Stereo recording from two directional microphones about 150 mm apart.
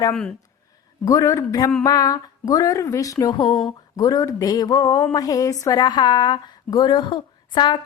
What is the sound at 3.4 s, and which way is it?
Speech, centre (ahead or behind).